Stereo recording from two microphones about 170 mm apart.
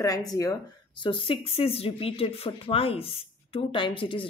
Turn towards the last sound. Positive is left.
turn(degrees=30)  # may be behind; listen again after turning